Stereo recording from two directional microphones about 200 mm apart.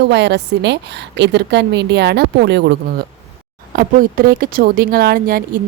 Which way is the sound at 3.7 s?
45° right (ahead or behind).